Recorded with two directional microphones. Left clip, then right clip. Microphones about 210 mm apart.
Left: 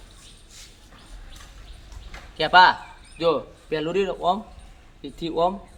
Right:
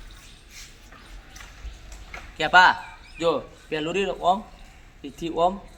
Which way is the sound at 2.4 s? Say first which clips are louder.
Left 1 dB; 20° left (ahead or behind).